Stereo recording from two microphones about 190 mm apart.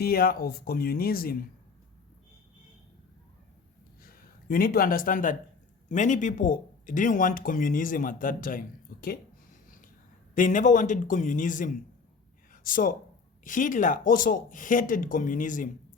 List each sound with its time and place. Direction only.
0.0 s speech: 50° left (ahead or behind)
4.0 s speech: 50° left (ahead or behind)
10.3 s speech: 45° left (ahead or behind)